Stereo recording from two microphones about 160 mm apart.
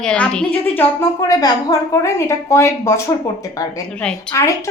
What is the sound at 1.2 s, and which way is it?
A woman's voice, 25° left (ahead or behind).